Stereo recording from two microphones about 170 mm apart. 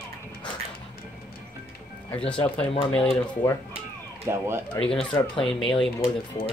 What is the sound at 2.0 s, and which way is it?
Speech, 5° left (ahead or behind).